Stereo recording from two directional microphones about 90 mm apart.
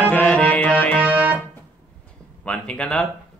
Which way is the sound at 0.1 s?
15° left (ahead or behind).